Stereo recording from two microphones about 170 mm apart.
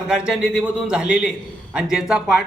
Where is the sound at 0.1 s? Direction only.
5° right (ahead or behind).